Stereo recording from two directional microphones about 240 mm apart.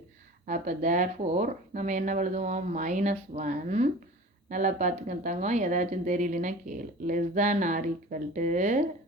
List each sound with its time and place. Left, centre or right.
0.4 s speech: right